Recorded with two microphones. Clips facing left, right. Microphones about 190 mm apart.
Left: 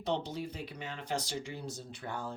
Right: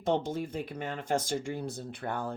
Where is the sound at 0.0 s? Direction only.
50° right (ahead or behind).